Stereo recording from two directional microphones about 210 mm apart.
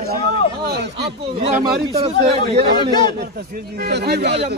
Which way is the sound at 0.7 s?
50° right (ahead or behind).